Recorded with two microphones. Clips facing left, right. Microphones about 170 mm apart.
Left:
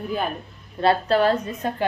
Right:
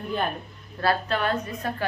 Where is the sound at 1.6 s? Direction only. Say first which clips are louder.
Left 5 dB; 20° left (ahead or behind).